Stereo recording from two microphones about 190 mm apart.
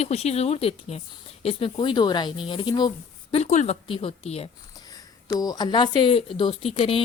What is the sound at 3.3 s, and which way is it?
A woman's voice, 35° left (ahead or behind).